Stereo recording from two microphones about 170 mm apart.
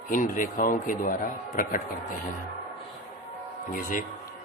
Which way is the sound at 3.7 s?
55° left (ahead or behind).